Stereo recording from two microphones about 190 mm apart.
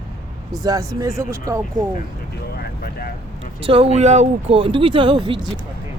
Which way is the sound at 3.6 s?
30° right (ahead or behind).